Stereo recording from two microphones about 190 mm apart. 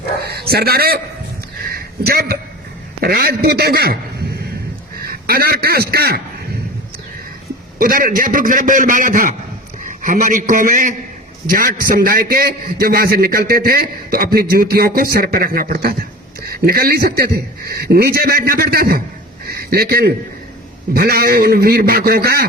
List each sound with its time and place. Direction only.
0.2 s a man's voice: 55° right (ahead or behind)
1.5 s a sound: 50° right (ahead or behind)
3.0 s a man's voice: 55° right (ahead or behind)
7.8 s a man's voice: 50° right (ahead or behind)